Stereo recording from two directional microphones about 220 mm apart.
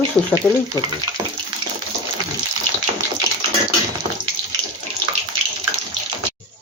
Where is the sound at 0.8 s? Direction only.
15° left (ahead or behind).